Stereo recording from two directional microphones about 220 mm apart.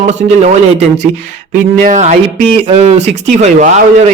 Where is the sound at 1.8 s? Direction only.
35° right (ahead or behind).